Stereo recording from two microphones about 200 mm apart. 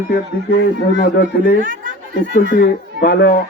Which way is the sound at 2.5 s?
50° left (ahead or behind).